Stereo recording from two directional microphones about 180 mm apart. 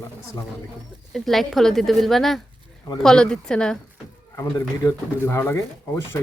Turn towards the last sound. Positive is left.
turn(degrees=15)  # may be behind; listen again after turning